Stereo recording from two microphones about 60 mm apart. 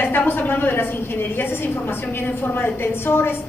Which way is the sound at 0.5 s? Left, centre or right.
Left.